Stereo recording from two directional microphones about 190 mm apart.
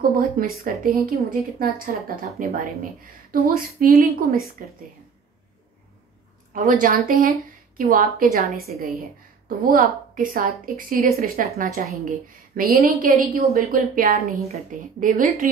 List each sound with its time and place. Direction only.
0.0 s speech: 45° right (ahead or behind)
6.5 s speech: 45° right (ahead or behind)